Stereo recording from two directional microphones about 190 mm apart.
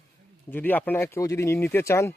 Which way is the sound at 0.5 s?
10° left (ahead or behind).